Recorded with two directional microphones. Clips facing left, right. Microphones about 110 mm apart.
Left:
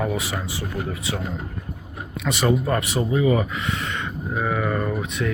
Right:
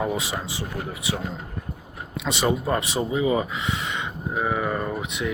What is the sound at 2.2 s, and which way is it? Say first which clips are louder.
Speech: left 2 dB; 20° right (ahead or behind).